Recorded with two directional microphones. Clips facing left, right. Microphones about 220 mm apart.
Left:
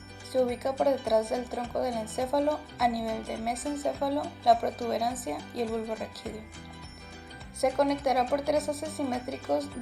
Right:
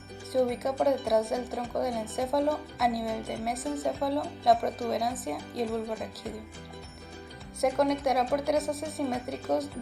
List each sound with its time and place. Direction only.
0.3 s a woman's voice: centre (ahead or behind)
7.6 s a woman's voice: centre (ahead or behind)